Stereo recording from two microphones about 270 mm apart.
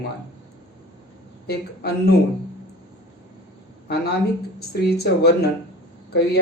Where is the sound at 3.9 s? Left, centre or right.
Left.